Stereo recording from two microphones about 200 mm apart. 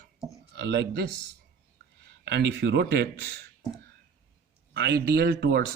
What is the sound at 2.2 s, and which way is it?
Speech, 60° right (ahead or behind).